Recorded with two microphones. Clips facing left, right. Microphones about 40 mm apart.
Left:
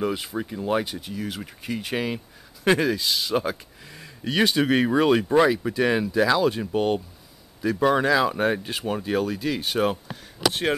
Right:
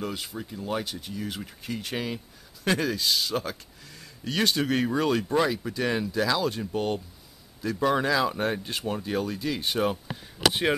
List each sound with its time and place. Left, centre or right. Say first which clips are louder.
0.0 s speech: left 7 dB; centre
3.3 s speech: left 6 dB; centre